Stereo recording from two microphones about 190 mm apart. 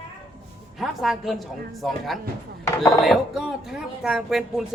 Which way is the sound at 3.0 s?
Centre (ahead or behind).